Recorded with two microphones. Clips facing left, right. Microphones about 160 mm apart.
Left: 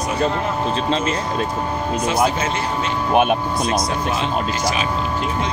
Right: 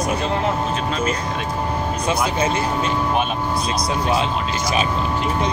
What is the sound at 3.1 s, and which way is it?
Speech, 55° left (ahead or behind).